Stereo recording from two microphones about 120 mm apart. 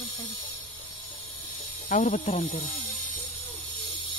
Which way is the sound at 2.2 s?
55° left (ahead or behind).